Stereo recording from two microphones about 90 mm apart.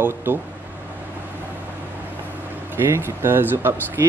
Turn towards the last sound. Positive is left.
turn(degrees=-25)  # may be behind; listen again after turning